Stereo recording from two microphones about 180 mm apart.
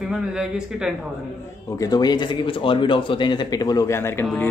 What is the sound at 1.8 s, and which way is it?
Speech, 20° left (ahead or behind).